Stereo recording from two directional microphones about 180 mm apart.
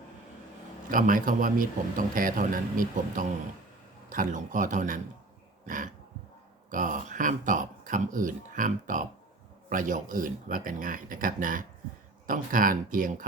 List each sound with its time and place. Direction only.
0.9 s a man's voice: 50° right (ahead or behind)
5.6 s throat clearing: 45° right (ahead or behind)
6.7 s a man's voice: 45° right (ahead or behind)